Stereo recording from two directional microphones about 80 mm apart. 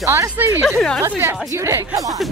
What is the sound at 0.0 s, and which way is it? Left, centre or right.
Speech, right.